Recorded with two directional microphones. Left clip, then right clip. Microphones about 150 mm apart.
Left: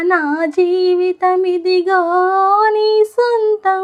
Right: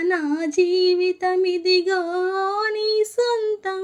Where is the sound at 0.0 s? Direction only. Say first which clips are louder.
Left 7 dB; 15° right (ahead or behind).